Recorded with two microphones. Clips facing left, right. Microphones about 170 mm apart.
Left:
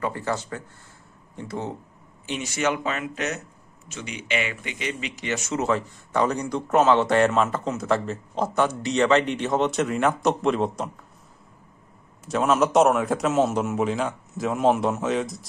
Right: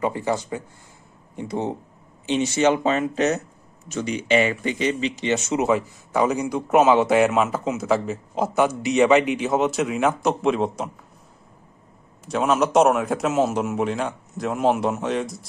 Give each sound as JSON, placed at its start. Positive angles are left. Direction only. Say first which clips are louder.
{"t": 0.0, "sound": "speech", "louder": "right 4 dB", "side_deg": -15}
{"t": 12.3, "sound": "a man's voice", "louder": "even", "side_deg": 0}